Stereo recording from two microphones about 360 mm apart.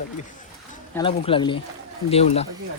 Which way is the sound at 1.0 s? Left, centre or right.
Centre.